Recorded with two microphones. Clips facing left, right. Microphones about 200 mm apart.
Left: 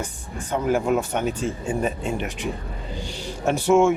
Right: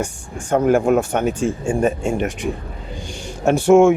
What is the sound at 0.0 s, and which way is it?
Speech, 45° right (ahead or behind).